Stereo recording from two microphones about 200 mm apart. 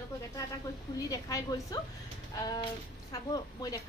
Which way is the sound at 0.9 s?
15° left (ahead or behind).